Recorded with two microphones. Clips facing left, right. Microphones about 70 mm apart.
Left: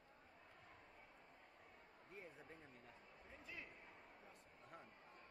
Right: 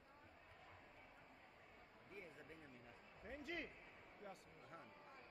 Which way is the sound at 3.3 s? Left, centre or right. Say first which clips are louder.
Right 8 dB; right.